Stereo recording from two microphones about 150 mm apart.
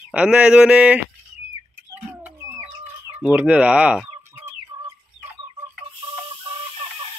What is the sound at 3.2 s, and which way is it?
Speech, 10° right (ahead or behind).